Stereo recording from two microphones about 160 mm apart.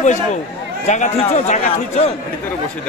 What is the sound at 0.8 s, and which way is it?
A man's voice, 45° left (ahead or behind).